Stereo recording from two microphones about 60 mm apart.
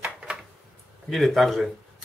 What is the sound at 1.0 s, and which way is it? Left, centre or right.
Speech, centre.